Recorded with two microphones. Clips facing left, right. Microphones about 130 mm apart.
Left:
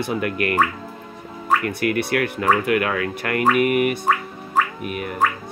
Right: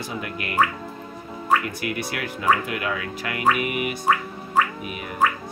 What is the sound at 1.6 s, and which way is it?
Speech, 55° left (ahead or behind).